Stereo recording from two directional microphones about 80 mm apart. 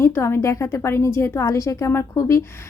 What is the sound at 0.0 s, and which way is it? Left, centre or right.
A woman's voice, left.